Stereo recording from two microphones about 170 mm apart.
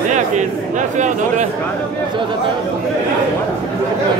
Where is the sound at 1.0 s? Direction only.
45° right (ahead or behind).